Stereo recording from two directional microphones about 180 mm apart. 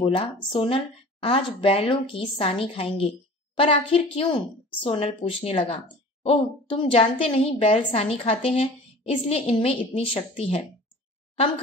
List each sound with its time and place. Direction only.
0.0 s a woman's voice: 30° left (ahead or behind)